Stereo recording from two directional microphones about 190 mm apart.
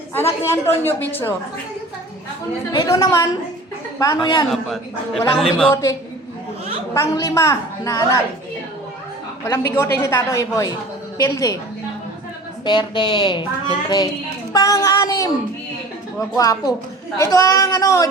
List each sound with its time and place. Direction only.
0.4 s a woman's voice: 15° left (ahead or behind)
2.7 s a woman's voice: 15° left (ahead or behind)
4.4 s a woman's voice: centre (ahead or behind)
6.9 s a woman's voice: 15° left (ahead or behind)
9.5 s a woman's voice: 15° left (ahead or behind)
12.6 s a woman's voice: 25° left (ahead or behind)